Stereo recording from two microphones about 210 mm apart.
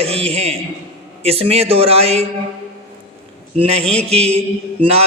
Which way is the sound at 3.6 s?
30° right (ahead or behind).